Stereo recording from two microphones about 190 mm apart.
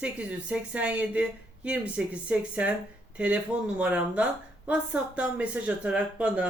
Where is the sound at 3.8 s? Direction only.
5° right (ahead or behind).